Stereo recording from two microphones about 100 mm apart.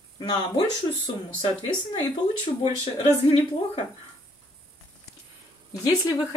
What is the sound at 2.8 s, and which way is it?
Speech, 75° left (ahead or behind).